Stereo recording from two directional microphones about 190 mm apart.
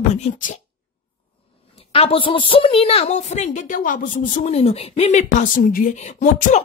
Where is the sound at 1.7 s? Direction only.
30° left (ahead or behind).